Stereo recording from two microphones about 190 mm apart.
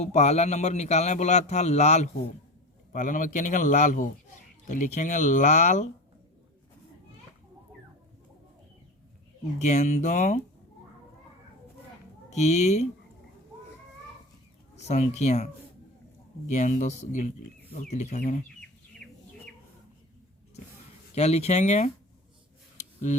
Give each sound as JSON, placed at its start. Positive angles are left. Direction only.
{"t": 0.0, "sound": "a man's voice", "side_deg": 35}
{"t": 9.6, "sound": "a man's voice", "side_deg": 40}
{"t": 12.3, "sound": "a man's voice", "side_deg": 35}
{"t": 14.8, "sound": "a man's voice", "side_deg": 35}
{"t": 19.0, "sound": "bird", "side_deg": 5}
{"t": 21.2, "sound": "a man's voice", "side_deg": 35}